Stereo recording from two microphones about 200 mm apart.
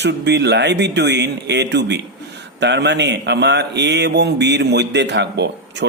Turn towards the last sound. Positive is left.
turn(degrees=-60)  # may be behind; listen again after turning